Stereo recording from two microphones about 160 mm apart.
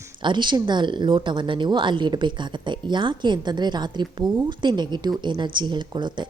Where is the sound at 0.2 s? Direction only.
30° right (ahead or behind).